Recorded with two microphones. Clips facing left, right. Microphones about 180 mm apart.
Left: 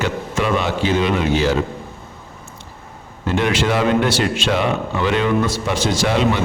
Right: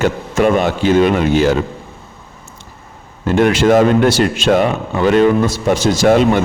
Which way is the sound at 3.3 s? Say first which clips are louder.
Right 7 dB; 50° right (ahead or behind).